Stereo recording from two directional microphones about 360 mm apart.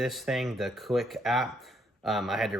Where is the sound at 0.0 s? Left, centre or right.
Centre.